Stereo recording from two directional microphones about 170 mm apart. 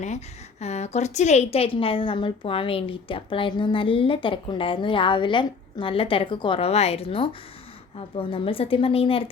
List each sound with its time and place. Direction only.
0.6 s a woman's voice: 40° left (ahead or behind)